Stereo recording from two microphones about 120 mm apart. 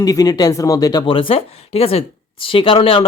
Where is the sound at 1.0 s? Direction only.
50° left (ahead or behind).